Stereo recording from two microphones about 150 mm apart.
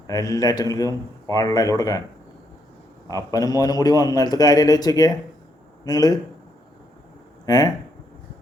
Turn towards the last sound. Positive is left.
turn(degrees=25)  # may be behind; listen again after turning